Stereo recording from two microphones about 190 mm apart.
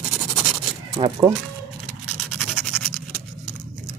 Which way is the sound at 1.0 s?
25° right (ahead or behind).